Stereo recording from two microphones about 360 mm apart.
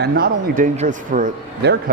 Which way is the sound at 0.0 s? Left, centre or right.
Right.